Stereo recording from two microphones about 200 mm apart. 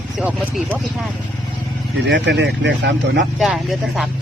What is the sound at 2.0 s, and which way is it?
Speech, 60° right (ahead or behind).